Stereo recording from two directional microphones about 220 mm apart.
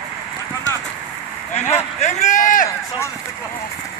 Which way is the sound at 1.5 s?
30° left (ahead or behind).